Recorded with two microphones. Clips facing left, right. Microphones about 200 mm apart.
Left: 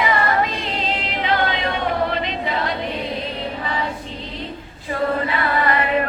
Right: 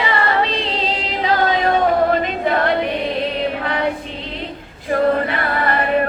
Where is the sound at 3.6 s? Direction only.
65° right (ahead or behind).